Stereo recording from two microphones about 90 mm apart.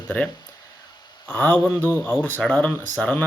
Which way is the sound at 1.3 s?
20° left (ahead or behind).